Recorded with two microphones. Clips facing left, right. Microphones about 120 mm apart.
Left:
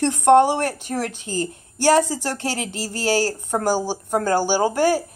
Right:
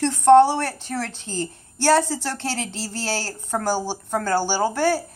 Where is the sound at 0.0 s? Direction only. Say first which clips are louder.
Right 1 dB; 15° left (ahead or behind).